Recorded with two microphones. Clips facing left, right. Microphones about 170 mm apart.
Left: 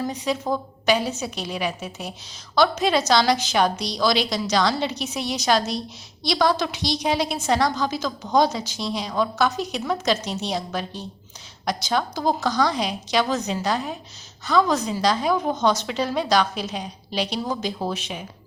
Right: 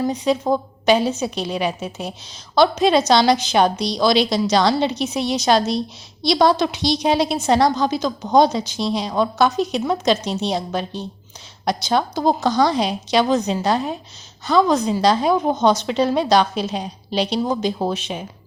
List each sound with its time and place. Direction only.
0.0 s a woman's voice: 20° right (ahead or behind)